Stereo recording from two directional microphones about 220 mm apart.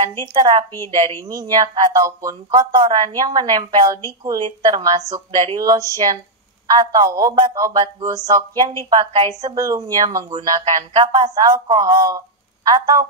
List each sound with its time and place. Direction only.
0.2 s a woman's voice: 20° right (ahead or behind)